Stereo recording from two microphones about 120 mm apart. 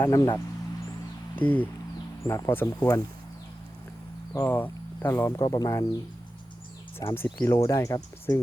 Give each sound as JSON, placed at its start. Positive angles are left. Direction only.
{"t": 0.0, "sound": "speech", "side_deg": 25}
{"t": 1.4, "sound": "speech", "side_deg": 15}
{"t": 2.8, "sound": "speech", "side_deg": 30}
{"t": 4.4, "sound": "speech", "side_deg": 15}
{"t": 5.4, "sound": "speech", "side_deg": 30}
{"t": 7.0, "sound": "speech", "side_deg": 20}